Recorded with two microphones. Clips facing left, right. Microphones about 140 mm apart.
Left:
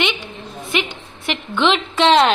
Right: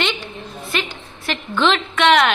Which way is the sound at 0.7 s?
20° left (ahead or behind).